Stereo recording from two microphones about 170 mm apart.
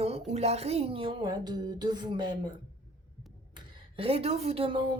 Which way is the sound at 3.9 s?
35° right (ahead or behind).